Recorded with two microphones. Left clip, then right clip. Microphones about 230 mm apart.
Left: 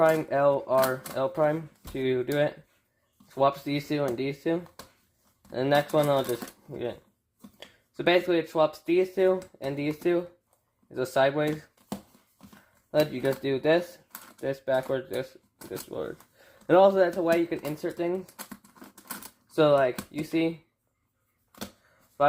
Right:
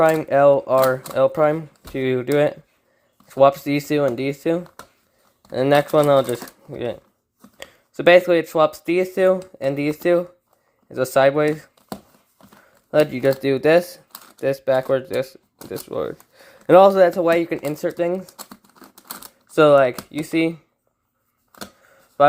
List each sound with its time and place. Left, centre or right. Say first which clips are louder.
0.0 s speech: right 8 dB; right
12.9 s speech: right 8 dB; right
19.5 s speech: right 9 dB; right